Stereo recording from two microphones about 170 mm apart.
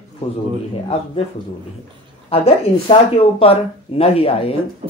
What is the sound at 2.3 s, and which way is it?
Speech, 35° left (ahead or behind).